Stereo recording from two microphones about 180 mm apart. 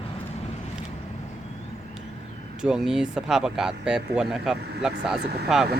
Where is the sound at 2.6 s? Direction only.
5° right (ahead or behind).